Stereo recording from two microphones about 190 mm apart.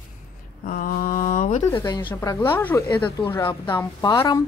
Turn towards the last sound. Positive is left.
turn(degrees=20)  # may be behind; listen again after turning